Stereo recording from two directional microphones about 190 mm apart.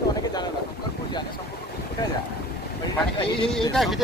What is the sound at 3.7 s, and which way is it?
Speech, centre (ahead or behind).